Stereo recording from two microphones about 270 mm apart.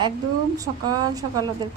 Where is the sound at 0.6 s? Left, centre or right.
Centre.